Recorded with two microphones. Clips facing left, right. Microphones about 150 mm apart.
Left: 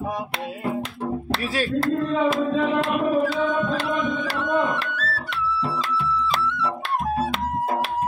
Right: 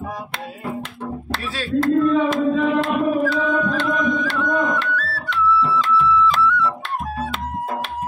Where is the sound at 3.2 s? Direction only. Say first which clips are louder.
Right 2 dB; 30° left (ahead or behind).